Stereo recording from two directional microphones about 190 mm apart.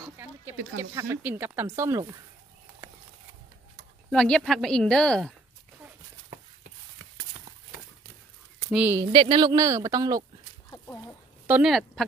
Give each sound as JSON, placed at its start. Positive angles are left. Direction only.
{"t": 0.7, "sound": "speech", "side_deg": -10}
{"t": 4.1, "sound": "a woman's voice", "side_deg": 5}
{"t": 8.7, "sound": "speech", "side_deg": -10}
{"t": 9.0, "sound": "speech", "side_deg": -25}
{"t": 10.7, "sound": "a sound", "side_deg": 10}
{"t": 11.4, "sound": "speech", "side_deg": -10}
{"t": 11.7, "sound": "a woman's voice", "side_deg": 0}